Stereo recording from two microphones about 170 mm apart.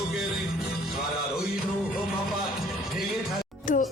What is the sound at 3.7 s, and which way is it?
Music, 50° left (ahead or behind).